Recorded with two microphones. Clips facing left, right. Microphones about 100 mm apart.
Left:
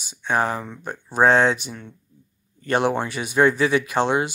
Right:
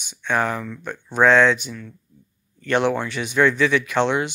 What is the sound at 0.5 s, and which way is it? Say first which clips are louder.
Speech: right 1 dB; 25° left (ahead or behind).